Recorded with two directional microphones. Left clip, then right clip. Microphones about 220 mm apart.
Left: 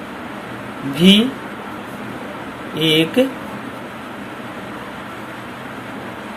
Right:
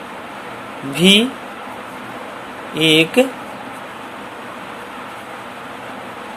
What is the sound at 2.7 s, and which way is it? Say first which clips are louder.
Speech: right 2 dB; 25° right (ahead or behind).